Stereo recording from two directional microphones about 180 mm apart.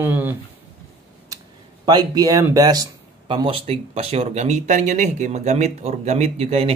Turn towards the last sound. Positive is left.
turn(degrees=-35)  # may be behind; listen again after turning